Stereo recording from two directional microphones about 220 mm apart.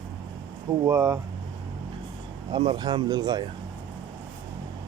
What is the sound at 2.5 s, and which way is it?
Speech, 20° right (ahead or behind).